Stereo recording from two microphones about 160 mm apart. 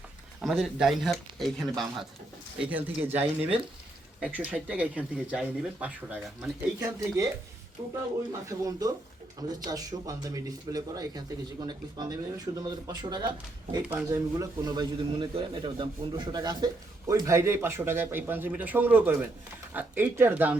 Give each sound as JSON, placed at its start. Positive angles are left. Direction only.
{"t": 0.4, "sound": "speech", "side_deg": 0}
{"t": 2.6, "sound": "speech", "side_deg": -10}
{"t": 8.3, "sound": "a man's voice", "side_deg": -20}
{"t": 13.8, "sound": "a man's voice", "side_deg": -15}